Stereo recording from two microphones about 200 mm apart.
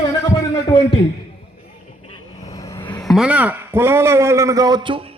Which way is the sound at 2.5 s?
20° left (ahead or behind).